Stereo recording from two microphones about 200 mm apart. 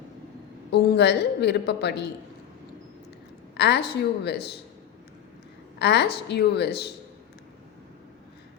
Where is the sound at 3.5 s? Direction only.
55° left (ahead or behind).